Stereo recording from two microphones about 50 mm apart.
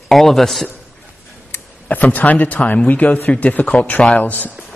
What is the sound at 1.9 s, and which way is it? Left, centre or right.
A man's voice, left.